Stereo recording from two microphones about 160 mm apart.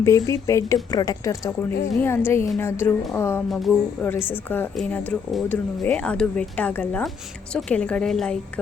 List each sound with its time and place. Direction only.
0.0 s a woman's voice: 20° left (ahead or behind)